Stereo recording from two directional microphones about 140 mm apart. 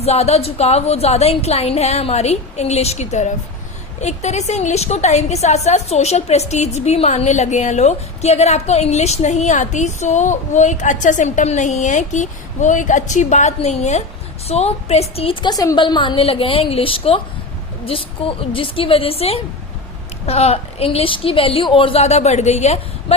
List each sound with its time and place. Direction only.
0.0 s a woman's voice: 45° left (ahead or behind)